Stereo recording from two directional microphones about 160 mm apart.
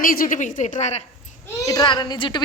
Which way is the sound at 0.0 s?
60° left (ahead or behind).